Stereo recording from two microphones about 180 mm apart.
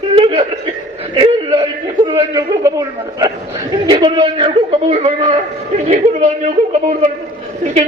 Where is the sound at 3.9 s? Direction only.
25° right (ahead or behind).